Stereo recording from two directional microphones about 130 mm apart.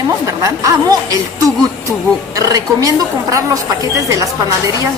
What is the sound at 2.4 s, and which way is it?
A woman's voice, 25° right (ahead or behind).